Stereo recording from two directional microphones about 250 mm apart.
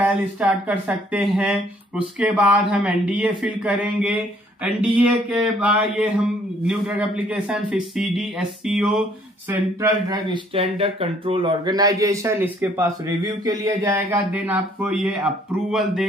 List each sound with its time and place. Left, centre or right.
0.4 s speech: centre